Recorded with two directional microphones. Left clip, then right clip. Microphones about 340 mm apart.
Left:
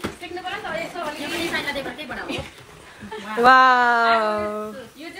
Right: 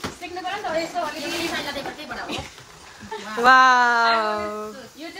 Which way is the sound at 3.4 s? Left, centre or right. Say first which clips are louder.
Left 1 dB; centre.